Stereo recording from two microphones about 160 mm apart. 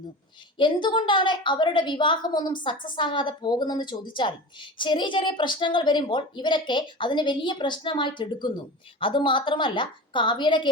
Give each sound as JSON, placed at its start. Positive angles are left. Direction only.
{"t": 0.6, "sound": "a woman's voice", "side_deg": 30}